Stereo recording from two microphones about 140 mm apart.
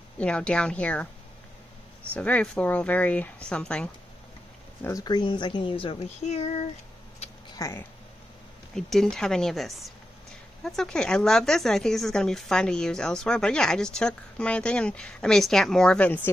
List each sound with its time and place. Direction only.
0.2 s speech: 10° left (ahead or behind)
2.1 s speech: 10° left (ahead or behind)
4.8 s a woman's voice: 25° left (ahead or behind); by 6.6 s 50° left (ahead or behind)
7.5 s speech: 25° left (ahead or behind)
8.7 s speech: 5° left (ahead or behind)